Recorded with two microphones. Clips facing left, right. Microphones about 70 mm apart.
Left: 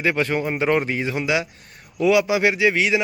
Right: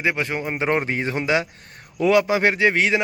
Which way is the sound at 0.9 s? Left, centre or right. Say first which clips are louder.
Right 1 dB; right.